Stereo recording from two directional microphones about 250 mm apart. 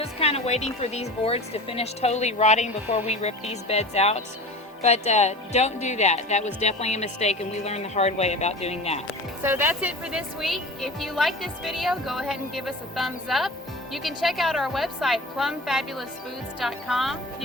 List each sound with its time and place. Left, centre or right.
0.0 s speech: left
9.4 s speech: centre